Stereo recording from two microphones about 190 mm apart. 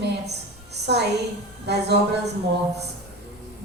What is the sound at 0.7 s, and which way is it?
Music, 60° right (ahead or behind).